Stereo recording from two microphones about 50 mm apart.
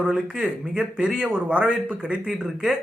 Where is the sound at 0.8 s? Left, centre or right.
Centre.